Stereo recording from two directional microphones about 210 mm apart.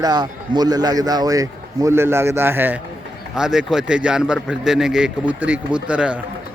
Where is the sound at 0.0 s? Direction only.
20° right (ahead or behind).